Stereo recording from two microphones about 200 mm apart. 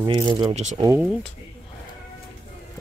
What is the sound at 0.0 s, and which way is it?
Speech, 20° right (ahead or behind).